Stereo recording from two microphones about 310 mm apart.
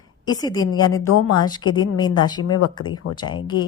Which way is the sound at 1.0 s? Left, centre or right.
Left.